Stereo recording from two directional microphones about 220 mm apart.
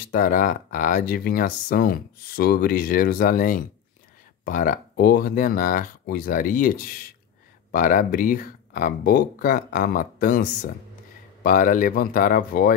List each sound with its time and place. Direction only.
0.1 s speech: 35° left (ahead or behind)
11.4 s speech: 35° left (ahead or behind)